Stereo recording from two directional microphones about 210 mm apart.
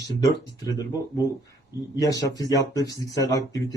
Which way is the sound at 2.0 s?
15° left (ahead or behind).